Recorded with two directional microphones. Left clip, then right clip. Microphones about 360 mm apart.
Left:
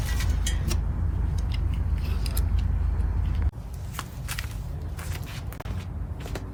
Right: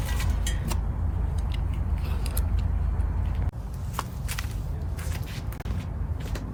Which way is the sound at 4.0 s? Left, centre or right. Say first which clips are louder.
Right 2 dB; centre.